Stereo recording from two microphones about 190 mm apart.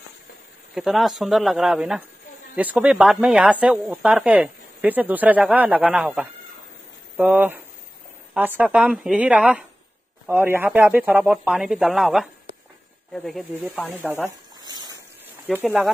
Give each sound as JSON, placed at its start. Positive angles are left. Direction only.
{"t": 0.7, "sound": "speech", "side_deg": 0}
{"t": 14.6, "sound": "a sound", "side_deg": -20}
{"t": 15.5, "sound": "speech", "side_deg": -5}